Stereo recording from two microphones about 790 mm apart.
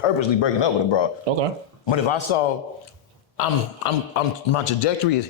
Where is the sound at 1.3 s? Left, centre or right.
Right.